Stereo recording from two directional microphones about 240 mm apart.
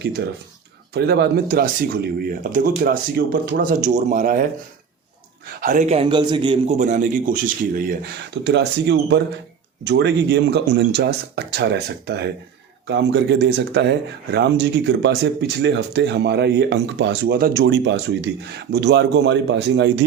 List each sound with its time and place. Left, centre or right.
0.9 s a man's voice: right
5.5 s a man's voice: right
8.4 s speech: right